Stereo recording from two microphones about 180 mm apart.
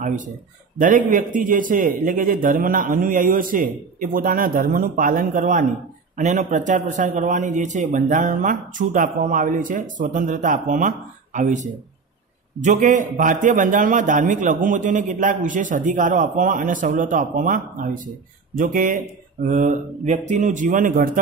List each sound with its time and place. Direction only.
0.7 s a man's voice: 45° right (ahead or behind)